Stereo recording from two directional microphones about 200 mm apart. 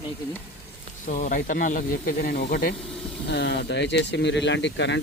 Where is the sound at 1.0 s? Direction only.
40° left (ahead or behind).